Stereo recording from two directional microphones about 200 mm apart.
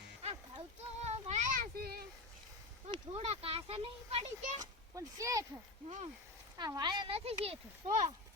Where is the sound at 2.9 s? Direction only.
30° right (ahead or behind).